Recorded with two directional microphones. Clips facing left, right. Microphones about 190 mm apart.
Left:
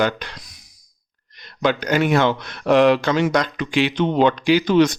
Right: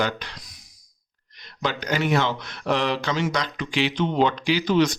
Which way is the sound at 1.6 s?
55° left (ahead or behind).